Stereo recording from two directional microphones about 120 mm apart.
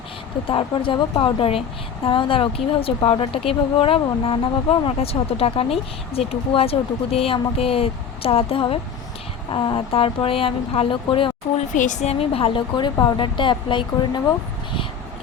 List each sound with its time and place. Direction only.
0.4 s speech: 45° left (ahead or behind)
11.7 s speech: 90° left
12.2 s speech: 50° left (ahead or behind)